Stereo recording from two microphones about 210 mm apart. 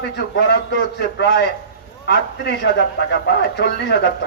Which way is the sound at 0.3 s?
50° left (ahead or behind).